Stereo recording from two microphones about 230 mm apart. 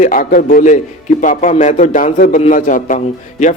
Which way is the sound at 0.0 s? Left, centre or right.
Left.